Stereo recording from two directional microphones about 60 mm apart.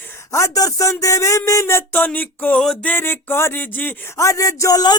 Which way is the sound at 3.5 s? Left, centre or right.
Left.